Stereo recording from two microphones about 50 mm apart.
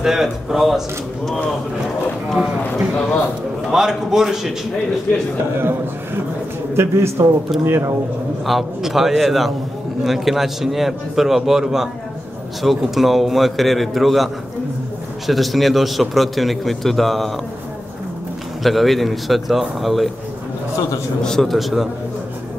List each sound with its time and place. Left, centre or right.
0.0 s speech: centre
3.7 s speech: centre
5.6 s a man's voice: right
6.7 s a man's voice: right
8.5 s a man's voice: centre
18.6 s a man's voice: centre
21.2 s a man's voice: centre